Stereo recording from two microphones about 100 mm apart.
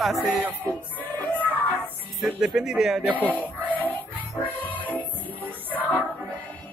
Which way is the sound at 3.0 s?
15° right (ahead or behind).